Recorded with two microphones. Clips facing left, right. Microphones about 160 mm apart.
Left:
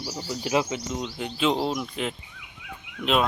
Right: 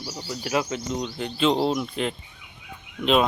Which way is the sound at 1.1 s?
10° left (ahead or behind).